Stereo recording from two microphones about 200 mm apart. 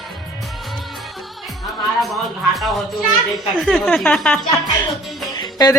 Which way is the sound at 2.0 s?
Centre (ahead or behind).